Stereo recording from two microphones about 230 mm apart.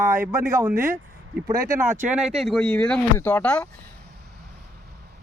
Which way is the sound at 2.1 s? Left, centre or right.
Centre.